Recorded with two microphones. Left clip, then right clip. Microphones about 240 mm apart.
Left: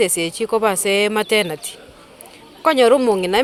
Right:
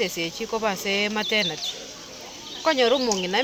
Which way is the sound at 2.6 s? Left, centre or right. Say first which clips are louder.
Left 7 dB; left.